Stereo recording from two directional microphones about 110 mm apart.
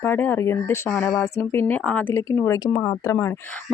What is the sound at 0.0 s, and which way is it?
Speech, 20° left (ahead or behind).